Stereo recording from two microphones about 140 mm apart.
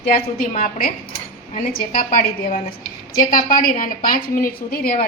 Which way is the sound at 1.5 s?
60° left (ahead or behind).